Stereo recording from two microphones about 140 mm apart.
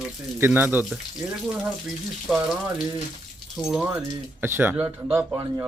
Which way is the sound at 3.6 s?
5° right (ahead or behind).